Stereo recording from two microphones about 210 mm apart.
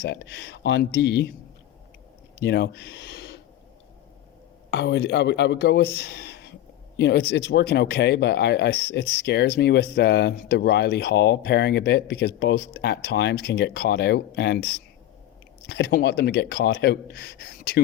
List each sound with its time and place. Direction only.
0.0 s speech: 50° left (ahead or behind)
2.4 s speech: 50° left (ahead or behind)
4.7 s speech: 55° left (ahead or behind)